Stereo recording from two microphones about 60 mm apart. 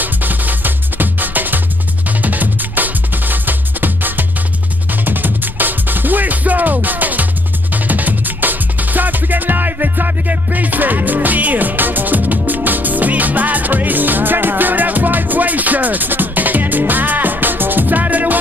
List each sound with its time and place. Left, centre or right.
0.0 s music: right